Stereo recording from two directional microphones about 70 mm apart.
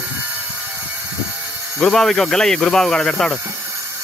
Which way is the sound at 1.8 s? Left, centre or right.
Centre.